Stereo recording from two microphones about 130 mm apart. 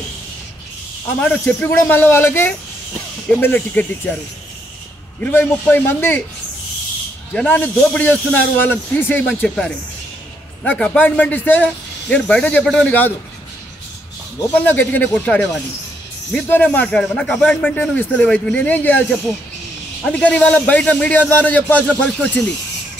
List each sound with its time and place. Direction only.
1.2 s speech: 10° left (ahead or behind)
5.2 s speech: 15° left (ahead or behind)
7.3 s speech: 15° left (ahead or behind)
14.5 s speech: 15° left (ahead or behind)
20.1 s speech: 10° left (ahead or behind)